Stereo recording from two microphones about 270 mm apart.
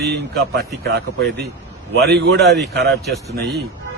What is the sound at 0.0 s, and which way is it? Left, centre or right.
A man's voice, right.